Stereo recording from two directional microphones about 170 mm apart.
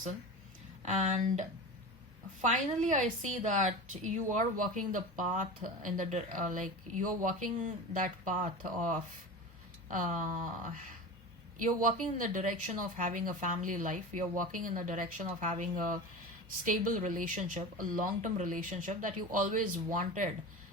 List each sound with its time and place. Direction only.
0.8 s speech: 45° right (ahead or behind)